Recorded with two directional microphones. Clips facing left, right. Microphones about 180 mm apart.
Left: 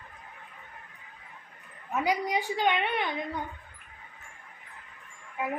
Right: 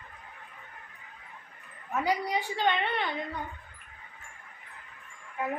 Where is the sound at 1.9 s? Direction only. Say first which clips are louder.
Left 1 dB; 15° left (ahead or behind).